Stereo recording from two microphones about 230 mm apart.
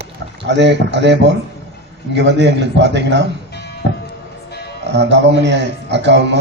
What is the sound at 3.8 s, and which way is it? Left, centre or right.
Music, right.